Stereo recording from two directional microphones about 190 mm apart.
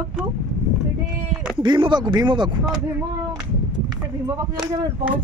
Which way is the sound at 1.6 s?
25° right (ahead or behind).